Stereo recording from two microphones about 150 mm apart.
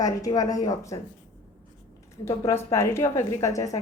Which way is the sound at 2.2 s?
15° left (ahead or behind).